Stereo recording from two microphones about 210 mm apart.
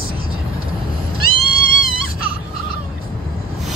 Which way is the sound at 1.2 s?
45° left (ahead or behind).